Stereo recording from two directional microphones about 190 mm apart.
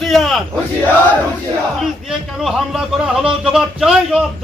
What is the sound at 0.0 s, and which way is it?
Crowd, centre (ahead or behind).